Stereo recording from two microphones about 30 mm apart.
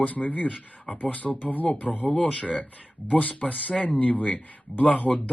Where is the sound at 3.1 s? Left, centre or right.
Left.